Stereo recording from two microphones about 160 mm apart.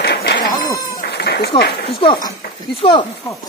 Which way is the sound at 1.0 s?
85° left.